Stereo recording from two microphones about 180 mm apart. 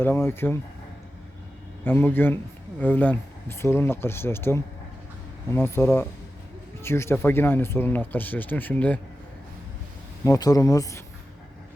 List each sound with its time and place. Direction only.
0.0 s speech: 10° left (ahead or behind)
1.8 s speech: 10° left (ahead or behind)
10.2 s speech: 20° left (ahead or behind)